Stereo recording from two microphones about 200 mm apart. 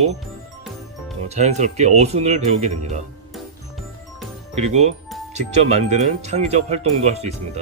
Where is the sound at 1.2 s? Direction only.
35° right (ahead or behind).